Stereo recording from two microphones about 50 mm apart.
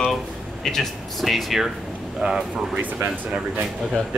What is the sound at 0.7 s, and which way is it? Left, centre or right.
Speech, centre.